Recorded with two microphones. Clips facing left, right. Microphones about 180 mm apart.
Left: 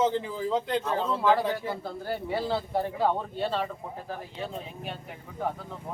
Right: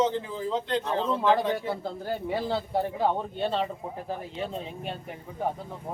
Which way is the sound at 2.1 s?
15° right (ahead or behind).